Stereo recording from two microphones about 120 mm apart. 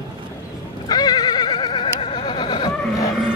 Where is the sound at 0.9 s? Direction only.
35° left (ahead or behind).